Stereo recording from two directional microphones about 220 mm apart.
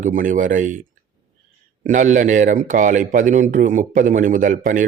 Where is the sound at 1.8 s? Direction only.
35° right (ahead or behind).